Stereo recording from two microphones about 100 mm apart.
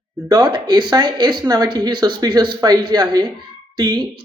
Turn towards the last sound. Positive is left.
turn(degrees=-40)  # may be behind; listen again after turning